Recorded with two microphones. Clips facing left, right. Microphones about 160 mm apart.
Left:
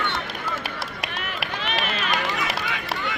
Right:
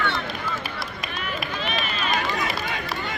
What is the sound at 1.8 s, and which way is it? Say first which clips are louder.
Run: even; 90° left.